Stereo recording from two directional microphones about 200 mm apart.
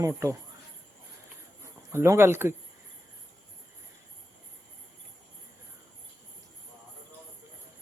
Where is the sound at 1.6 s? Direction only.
15° right (ahead or behind).